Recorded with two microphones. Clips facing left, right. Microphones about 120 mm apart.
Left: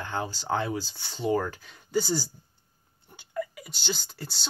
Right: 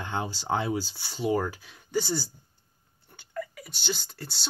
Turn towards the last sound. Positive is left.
turn(degrees=0)  # may be behind; listen again after turning